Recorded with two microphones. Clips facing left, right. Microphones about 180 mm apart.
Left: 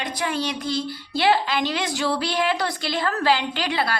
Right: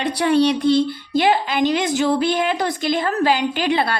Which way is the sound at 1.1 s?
15° right (ahead or behind).